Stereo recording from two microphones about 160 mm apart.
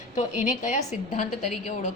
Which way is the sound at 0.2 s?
50° left (ahead or behind).